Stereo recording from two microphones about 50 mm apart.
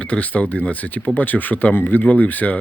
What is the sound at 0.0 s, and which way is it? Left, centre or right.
Speech, left.